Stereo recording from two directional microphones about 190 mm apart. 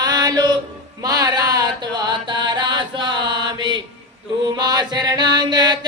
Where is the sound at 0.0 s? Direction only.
20° right (ahead or behind).